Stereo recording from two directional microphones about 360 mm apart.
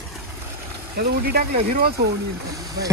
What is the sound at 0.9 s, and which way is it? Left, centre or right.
Speech, right.